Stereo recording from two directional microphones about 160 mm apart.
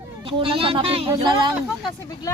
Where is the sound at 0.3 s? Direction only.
35° right (ahead or behind).